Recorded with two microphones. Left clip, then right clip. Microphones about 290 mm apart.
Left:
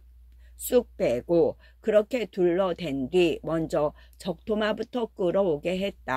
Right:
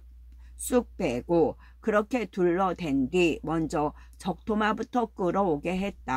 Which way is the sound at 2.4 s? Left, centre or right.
Left.